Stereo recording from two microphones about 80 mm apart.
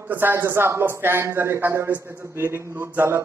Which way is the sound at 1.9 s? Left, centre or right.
Right.